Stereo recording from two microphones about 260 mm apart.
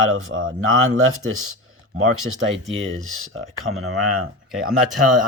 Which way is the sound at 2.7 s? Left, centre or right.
Right.